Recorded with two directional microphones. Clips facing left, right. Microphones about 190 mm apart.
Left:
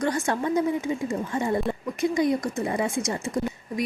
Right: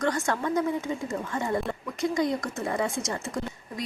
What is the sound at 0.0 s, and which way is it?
A woman's voice, 20° left (ahead or behind).